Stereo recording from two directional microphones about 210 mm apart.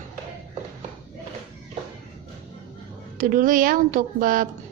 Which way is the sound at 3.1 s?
40° right (ahead or behind).